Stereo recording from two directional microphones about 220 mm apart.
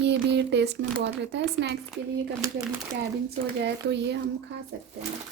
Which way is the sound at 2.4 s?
15° right (ahead or behind).